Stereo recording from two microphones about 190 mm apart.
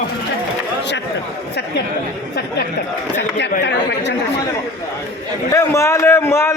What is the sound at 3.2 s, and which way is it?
Speech, 65° left (ahead or behind).